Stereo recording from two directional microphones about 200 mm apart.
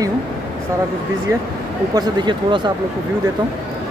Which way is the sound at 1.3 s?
15° right (ahead or behind).